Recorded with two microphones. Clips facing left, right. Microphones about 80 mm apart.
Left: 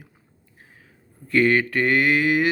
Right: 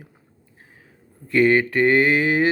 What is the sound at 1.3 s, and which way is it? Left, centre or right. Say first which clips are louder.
Speech: right 2 dB; right.